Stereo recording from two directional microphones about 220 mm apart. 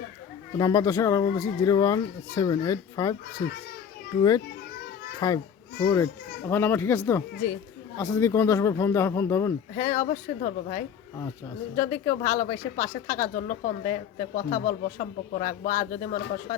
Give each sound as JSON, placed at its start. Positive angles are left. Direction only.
{"t": 0.5, "sound": "speech", "side_deg": 15}
{"t": 9.7, "sound": "speech", "side_deg": 35}